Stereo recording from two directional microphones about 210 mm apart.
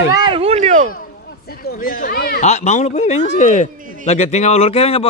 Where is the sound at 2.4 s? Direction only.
35° left (ahead or behind).